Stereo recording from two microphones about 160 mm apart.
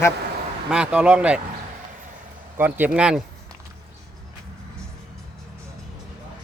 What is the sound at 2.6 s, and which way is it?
Speech, 10° right (ahead or behind).